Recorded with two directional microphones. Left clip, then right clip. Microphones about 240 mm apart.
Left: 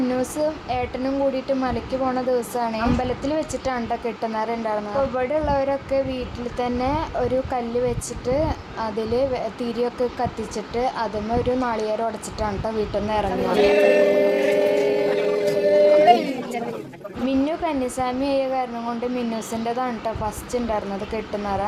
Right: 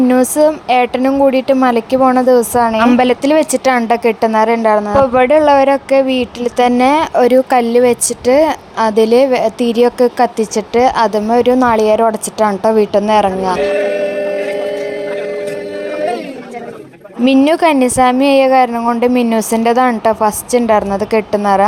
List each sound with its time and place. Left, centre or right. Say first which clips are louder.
0.1 s a woman's voice: right 13 dB; right
17.2 s a woman's voice: right 13 dB; right